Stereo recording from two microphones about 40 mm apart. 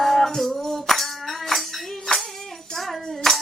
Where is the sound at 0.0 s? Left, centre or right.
Centre.